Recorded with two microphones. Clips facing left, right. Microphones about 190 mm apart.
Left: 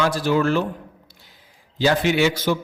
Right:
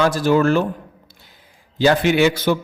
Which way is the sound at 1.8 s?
55° right (ahead or behind).